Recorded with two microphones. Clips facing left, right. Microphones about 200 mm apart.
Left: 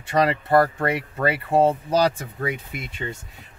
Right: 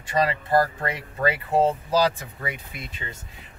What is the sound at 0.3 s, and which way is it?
Speech, 60° left (ahead or behind).